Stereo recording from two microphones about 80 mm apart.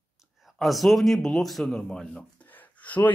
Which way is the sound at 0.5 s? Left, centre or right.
Centre.